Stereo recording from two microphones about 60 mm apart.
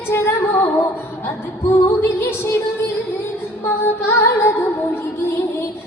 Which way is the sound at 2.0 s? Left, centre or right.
Left.